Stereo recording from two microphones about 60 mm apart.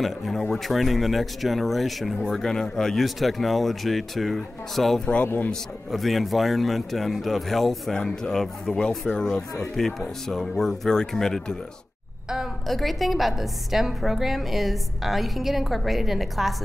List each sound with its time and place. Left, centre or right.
0.0 s speech: centre
5.0 s a man's voice: left
5.9 s speech: centre
12.6 s speech: centre